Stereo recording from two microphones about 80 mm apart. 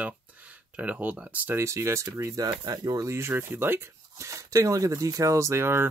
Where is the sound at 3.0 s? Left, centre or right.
Right.